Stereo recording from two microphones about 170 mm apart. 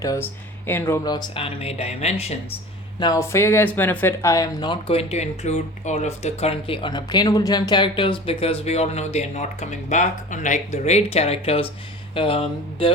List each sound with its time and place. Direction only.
0.7 s speech: 15° left (ahead or behind); by 2.4 s 40° left (ahead or behind)
3.0 s speech: 20° left (ahead or behind)